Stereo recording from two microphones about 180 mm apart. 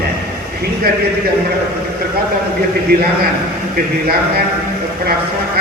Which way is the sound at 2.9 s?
60° right (ahead or behind).